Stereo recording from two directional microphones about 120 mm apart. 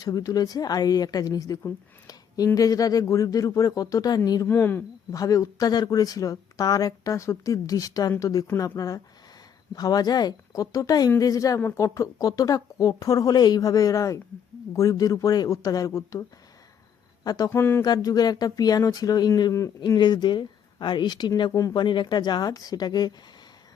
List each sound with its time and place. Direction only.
0.0 s speech: 30° left (ahead or behind)
4.4 s speech: 15° left (ahead or behind)
5.1 s speech: 30° left (ahead or behind)
17.2 s speech: 30° left (ahead or behind)
17.8 s speech: 35° left (ahead or behind)